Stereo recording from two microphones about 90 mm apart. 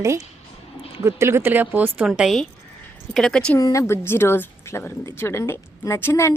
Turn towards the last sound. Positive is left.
turn(degrees=25)  # may be behind; listen again after turning